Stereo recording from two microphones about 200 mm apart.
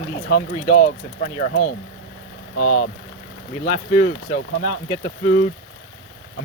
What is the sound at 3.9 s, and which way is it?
Speech, 45° left (ahead or behind).